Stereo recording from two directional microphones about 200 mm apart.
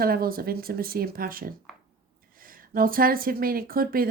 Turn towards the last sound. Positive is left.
turn(degrees=-45)  # may be behind; listen again after turning